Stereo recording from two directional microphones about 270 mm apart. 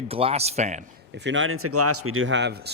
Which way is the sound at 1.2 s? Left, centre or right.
Right.